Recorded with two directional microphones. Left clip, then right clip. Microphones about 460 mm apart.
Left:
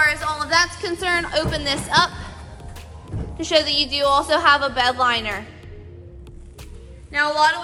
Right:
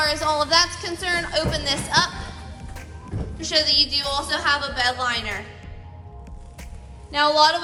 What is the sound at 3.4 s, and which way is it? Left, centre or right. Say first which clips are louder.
A woman's voice: left 1 dB; centre.